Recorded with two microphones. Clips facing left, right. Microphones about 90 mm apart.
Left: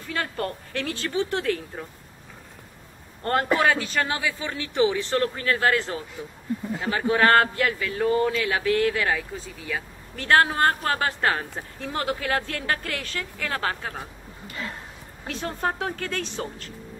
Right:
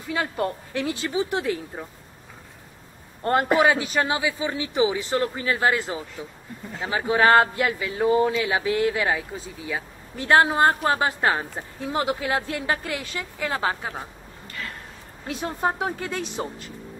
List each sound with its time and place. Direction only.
0.1 s a woman's voice: 15° right (ahead or behind)
3.3 s a woman's voice: 15° right (ahead or behind)
15.2 s a woman's voice: 15° right (ahead or behind)